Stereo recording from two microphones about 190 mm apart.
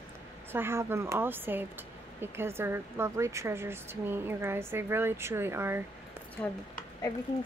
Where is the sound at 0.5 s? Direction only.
15° right (ahead or behind).